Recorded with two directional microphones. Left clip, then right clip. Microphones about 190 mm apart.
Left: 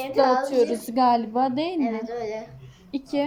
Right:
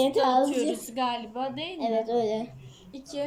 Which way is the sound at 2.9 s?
20° left (ahead or behind).